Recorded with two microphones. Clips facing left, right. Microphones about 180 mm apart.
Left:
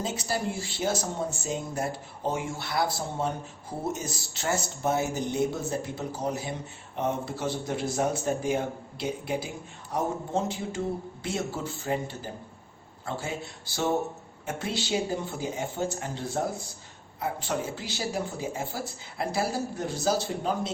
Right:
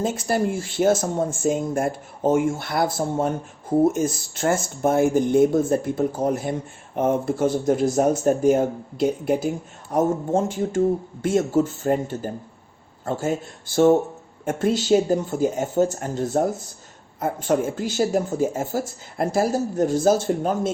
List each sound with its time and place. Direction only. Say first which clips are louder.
0.0 s speech: right 8 dB; 50° right (ahead or behind)